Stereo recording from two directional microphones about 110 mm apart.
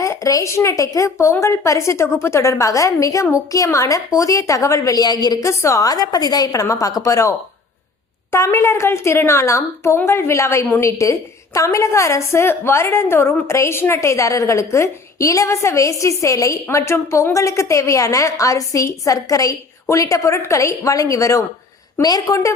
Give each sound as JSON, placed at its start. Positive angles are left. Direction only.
{"t": 0.0, "sound": "a woman's voice", "side_deg": 30}